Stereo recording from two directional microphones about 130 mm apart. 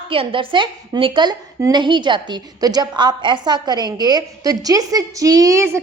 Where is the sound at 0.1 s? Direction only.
45° right (ahead or behind).